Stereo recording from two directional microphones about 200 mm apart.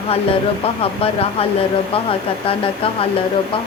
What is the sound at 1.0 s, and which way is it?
Speech, 30° left (ahead or behind).